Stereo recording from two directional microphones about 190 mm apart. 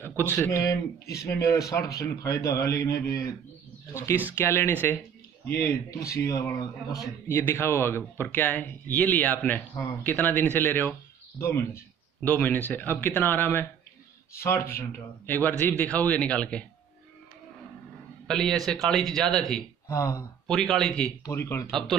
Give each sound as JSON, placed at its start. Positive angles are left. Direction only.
{"t": 0.0, "sound": "a man's voice", "side_deg": 10}
{"t": 6.2, "sound": "a man's voice", "side_deg": 15}
{"t": 18.2, "sound": "a man's voice", "side_deg": 5}
{"t": 19.9, "sound": "a man's voice", "side_deg": 15}
{"t": 20.4, "sound": "speech", "side_deg": 0}
{"t": 21.3, "sound": "a man's voice", "side_deg": 15}
{"t": 21.6, "sound": "speech", "side_deg": 0}